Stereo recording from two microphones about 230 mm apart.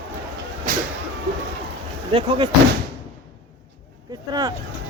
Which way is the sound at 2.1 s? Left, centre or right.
Right.